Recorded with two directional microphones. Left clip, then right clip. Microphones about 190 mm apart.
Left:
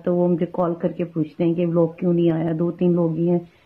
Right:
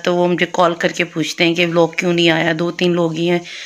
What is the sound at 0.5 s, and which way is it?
Speech, 25° right (ahead or behind).